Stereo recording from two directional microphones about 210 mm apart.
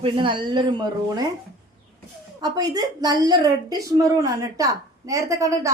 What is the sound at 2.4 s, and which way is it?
A woman's voice, 20° right (ahead or behind).